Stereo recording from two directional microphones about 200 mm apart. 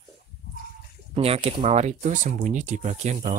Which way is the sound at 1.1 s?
30° right (ahead or behind).